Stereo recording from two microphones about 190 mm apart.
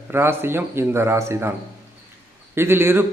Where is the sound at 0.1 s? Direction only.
10° right (ahead or behind).